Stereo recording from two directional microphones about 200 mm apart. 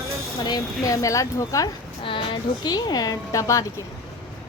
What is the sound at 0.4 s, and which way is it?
Speech, 20° left (ahead or behind).